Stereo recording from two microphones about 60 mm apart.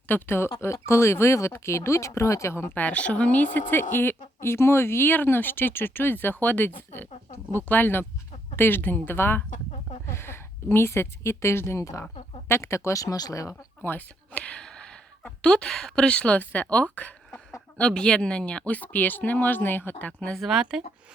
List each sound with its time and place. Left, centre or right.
0.1 s speech: left
2.7 s speech: left
11.8 s speech: left
12.5 s speech: left
13.0 s speech: left
13.8 s speech: left
14.6 s speech: centre
20.3 s speech: centre
20.6 s a woman's voice: centre